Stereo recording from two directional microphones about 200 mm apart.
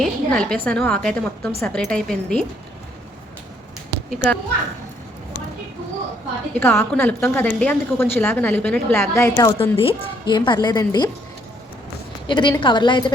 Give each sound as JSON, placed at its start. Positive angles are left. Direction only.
{"t": 0.0, "sound": "a woman's voice", "side_deg": 5}
{"t": 4.1, "sound": "a woman's voice", "side_deg": 5}
{"t": 6.5, "sound": "a woman's voice", "side_deg": 10}
{"t": 12.3, "sound": "a woman's voice", "side_deg": 25}